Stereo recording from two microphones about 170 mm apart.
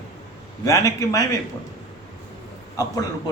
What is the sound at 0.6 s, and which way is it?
Speech, 20° left (ahead or behind).